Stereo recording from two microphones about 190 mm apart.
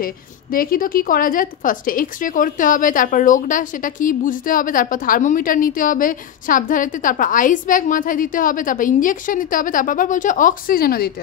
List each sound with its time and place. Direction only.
0.0 s a woman's voice: 50° left (ahead or behind)